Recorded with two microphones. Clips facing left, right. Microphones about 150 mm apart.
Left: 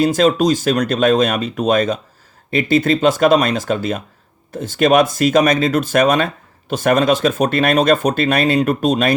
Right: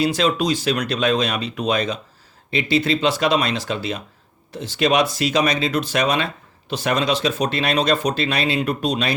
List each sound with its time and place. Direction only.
0.0 s speech: 45° left (ahead or behind)